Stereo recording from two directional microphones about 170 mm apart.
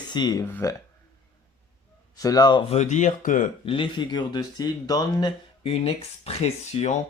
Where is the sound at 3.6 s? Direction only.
30° left (ahead or behind).